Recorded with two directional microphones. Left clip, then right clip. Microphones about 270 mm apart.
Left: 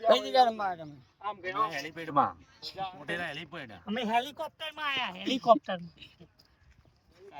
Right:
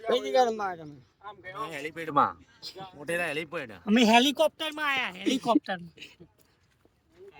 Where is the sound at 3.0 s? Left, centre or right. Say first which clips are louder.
Right 5 dB; right.